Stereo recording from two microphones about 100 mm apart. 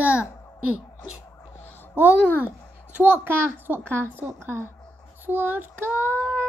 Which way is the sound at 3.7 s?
20° right (ahead or behind).